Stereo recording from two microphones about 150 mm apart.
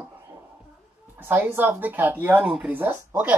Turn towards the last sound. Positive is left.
turn(degrees=-10)  # may be behind; listen again after turning